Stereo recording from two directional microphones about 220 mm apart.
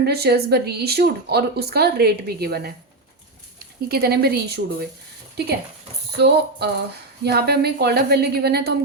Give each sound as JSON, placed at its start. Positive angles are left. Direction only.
{"t": 0.0, "sound": "speech", "side_deg": -45}
{"t": 3.8, "sound": "speech", "side_deg": -45}